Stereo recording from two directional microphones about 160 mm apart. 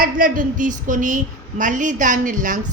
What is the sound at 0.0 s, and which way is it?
A woman's voice, 60° right (ahead or behind).